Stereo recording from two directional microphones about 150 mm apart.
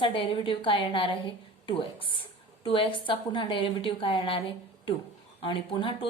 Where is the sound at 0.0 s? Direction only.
35° left (ahead or behind).